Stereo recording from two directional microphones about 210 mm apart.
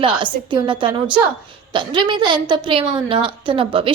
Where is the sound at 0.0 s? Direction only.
20° right (ahead or behind).